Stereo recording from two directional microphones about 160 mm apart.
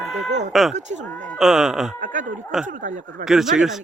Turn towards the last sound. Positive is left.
turn(degrees=0)  # may be behind; listen again after turning